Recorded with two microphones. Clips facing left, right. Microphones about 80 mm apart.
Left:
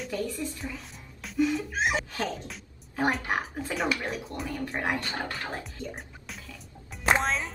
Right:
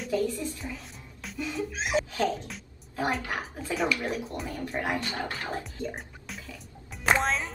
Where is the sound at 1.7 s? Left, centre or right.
Left.